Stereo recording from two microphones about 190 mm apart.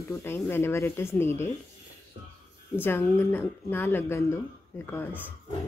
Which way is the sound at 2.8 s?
15° left (ahead or behind).